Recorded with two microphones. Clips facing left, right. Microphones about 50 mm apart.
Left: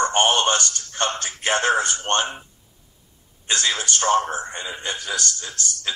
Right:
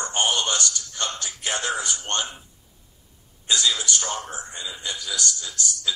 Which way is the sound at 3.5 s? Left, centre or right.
Left.